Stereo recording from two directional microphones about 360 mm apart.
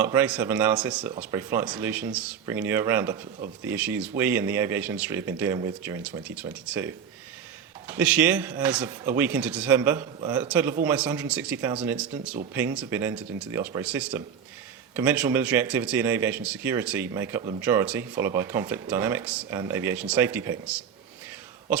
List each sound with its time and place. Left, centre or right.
0.0 s speech: centre